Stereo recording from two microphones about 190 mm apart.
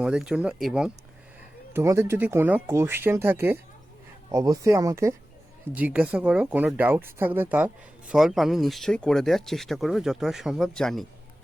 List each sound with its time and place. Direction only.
0.0 s speech: 5° right (ahead or behind)